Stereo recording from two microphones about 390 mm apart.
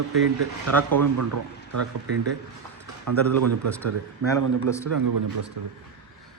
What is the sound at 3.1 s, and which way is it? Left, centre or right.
Speech, right.